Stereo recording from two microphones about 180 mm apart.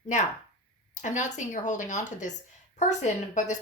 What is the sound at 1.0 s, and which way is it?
A woman's voice, 40° left (ahead or behind).